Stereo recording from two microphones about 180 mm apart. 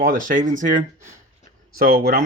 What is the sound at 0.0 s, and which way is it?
Speech, 50° right (ahead or behind).